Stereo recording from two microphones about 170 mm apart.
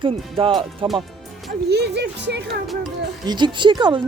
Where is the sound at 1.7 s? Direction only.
75° right (ahead or behind).